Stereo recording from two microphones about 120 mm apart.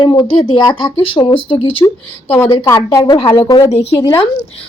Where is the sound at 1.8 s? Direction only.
20° left (ahead or behind); by 4.3 s 40° left (ahead or behind).